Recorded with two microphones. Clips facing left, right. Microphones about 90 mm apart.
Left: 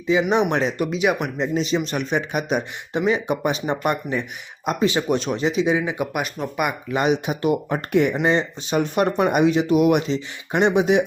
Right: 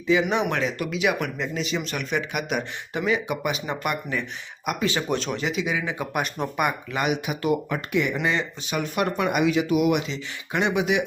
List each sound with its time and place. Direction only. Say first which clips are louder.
0.1 s speech: left 3 dB; 20° left (ahead or behind)
5.8 s speech: left 3 dB; 15° left (ahead or behind)
6.9 s speech: left 5 dB; 30° left (ahead or behind)
7.7 s speech: left 5 dB; 40° left (ahead or behind)
8.1 s speech: left 5 dB; 30° left (ahead or behind)
10.2 s speech: left 5 dB; 30° left (ahead or behind)